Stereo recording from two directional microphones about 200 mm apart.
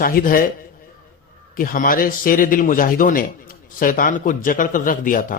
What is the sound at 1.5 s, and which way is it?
A man's voice, 45° left (ahead or behind).